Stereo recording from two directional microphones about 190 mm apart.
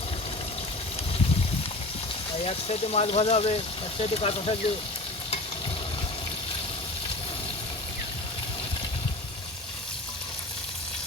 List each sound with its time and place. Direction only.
2.4 s speech: 30° left (ahead or behind)